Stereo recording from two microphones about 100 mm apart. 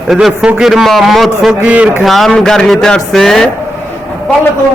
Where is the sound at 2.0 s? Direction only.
Centre (ahead or behind).